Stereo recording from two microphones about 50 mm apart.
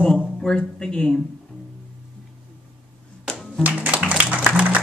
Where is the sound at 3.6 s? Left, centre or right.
Right.